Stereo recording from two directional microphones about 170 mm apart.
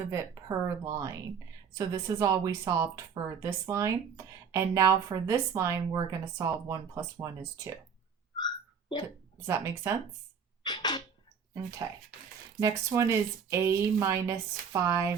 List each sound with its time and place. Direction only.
0.0 s speech: 20° right (ahead or behind)
8.4 s hiccup: 25° left (ahead or behind)
9.5 s speech: 15° right (ahead or behind)
10.6 s sneeze: 25° left (ahead or behind)
12.5 s speech: 20° right (ahead or behind)